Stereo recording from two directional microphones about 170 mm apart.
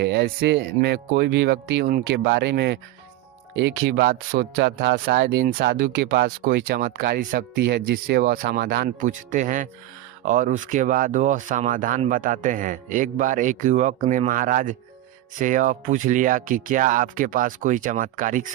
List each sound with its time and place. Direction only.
0.0 s speech: 70° right (ahead or behind)
3.5 s speech: 90° right; by 4.1 s 75° right (ahead or behind)
4.1 s speech: 60° right (ahead or behind)
6.1 s speech: 70° right (ahead or behind); by 18.4 s 50° right (ahead or behind)